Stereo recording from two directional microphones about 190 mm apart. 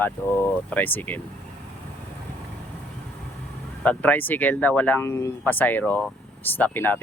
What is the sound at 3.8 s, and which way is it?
Speech, 10° left (ahead or behind).